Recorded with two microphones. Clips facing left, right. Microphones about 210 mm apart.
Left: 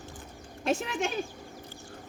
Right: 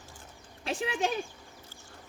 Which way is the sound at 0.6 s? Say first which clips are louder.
Left 6 dB; 45° left (ahead or behind).